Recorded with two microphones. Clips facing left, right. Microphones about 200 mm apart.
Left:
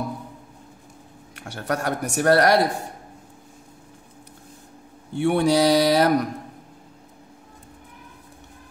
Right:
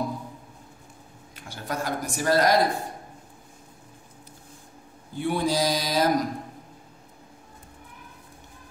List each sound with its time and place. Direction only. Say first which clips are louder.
1.3 s speech: left 6 dB; 70° left (ahead or behind)
5.1 s speech: left 6 dB; 70° left (ahead or behind)